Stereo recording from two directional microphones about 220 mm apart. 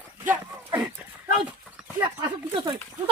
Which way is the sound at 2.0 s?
20° right (ahead or behind).